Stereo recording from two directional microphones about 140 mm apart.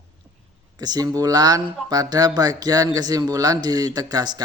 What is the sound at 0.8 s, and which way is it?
Speech, 30° right (ahead or behind).